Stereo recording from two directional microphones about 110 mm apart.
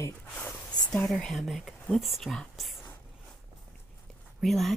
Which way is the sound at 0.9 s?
Centre (ahead or behind).